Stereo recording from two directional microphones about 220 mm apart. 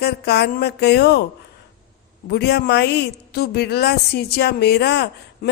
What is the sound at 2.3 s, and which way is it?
A woman's voice, 50° left (ahead or behind).